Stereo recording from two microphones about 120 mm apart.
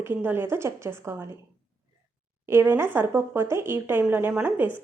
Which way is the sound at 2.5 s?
20° right (ahead or behind).